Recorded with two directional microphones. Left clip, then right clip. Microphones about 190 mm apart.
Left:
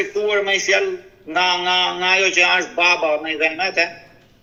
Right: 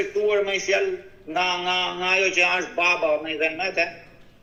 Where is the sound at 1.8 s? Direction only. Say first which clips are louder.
Left 6 dB; 35° left (ahead or behind).